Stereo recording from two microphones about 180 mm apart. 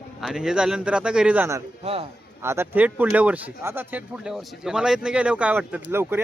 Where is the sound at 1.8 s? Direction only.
35° right (ahead or behind).